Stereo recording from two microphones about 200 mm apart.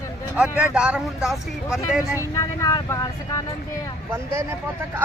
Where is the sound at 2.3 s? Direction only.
15° left (ahead or behind).